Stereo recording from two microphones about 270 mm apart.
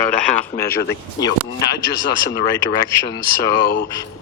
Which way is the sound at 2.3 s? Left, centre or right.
Centre.